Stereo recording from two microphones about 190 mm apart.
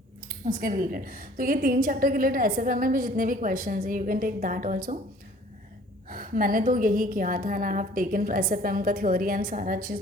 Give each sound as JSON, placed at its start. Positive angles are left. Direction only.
{"t": 0.4, "sound": "a woman's voice", "side_deg": -45}
{"t": 6.1, "sound": "a woman's voice", "side_deg": -50}